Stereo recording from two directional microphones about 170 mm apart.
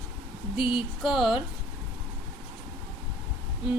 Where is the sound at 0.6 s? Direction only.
30° left (ahead or behind).